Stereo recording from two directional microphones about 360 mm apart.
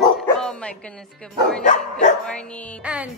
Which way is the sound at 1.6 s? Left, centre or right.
Centre.